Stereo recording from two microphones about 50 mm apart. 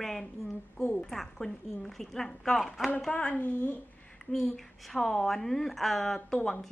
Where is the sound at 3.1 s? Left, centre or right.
Left.